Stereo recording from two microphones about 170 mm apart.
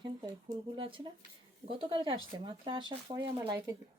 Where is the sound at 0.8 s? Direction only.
30° right (ahead or behind).